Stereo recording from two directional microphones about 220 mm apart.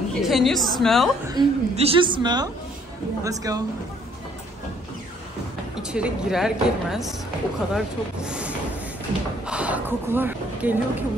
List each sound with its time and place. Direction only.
0.2 s a woman's voice: centre (ahead or behind)
1.3 s a woman's voice: 25° right (ahead or behind)
5.8 s a woman's voice: 5° right (ahead or behind)
9.5 s a sound: 5° right (ahead or behind)